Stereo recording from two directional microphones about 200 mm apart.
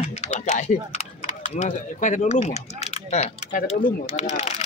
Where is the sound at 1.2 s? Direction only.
35° left (ahead or behind).